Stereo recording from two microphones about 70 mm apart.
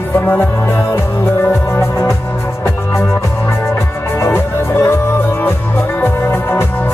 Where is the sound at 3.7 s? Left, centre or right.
Left.